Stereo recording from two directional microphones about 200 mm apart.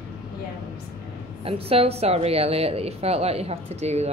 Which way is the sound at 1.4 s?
30° right (ahead or behind).